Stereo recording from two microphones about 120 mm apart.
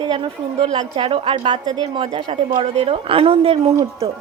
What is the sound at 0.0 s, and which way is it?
Speech, 40° right (ahead or behind).